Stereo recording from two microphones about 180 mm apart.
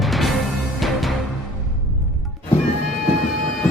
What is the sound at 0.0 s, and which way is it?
Music, centre (ahead or behind).